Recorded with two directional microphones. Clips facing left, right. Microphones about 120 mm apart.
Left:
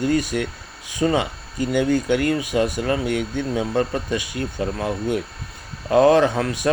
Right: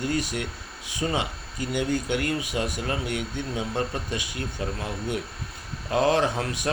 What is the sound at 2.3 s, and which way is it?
Speech, 55° left (ahead or behind).